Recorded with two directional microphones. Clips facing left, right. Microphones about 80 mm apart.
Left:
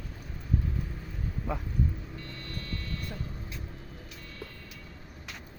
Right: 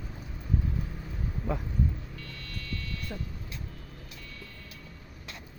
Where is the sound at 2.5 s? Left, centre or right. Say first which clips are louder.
Even; left.